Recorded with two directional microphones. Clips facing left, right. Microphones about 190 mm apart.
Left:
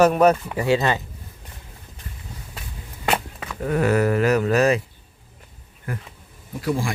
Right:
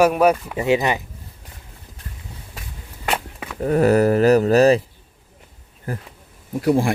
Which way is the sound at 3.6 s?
35° right (ahead or behind).